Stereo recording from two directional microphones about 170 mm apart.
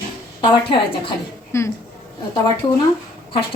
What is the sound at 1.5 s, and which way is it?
Speech, 15° left (ahead or behind).